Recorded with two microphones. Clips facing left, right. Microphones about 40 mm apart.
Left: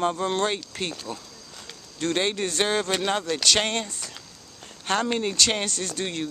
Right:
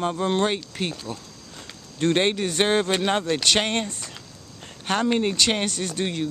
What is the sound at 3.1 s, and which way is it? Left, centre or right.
Speech, right.